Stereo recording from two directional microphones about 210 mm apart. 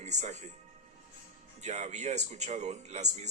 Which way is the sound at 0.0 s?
35° right (ahead or behind).